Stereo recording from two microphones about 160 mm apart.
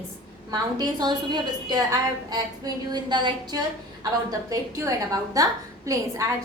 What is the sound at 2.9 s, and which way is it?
A woman's voice, 30° right (ahead or behind).